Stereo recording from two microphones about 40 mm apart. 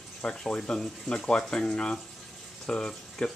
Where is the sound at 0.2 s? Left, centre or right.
Left.